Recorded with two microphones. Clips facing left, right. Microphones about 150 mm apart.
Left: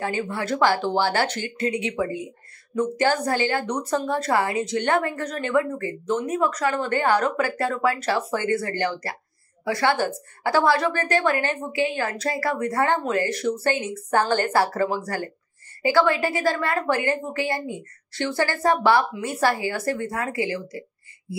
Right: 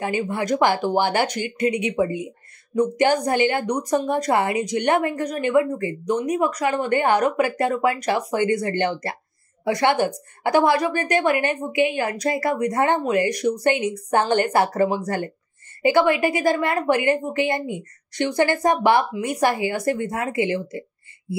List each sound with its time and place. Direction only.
0.0 s a woman's voice: 15° right (ahead or behind)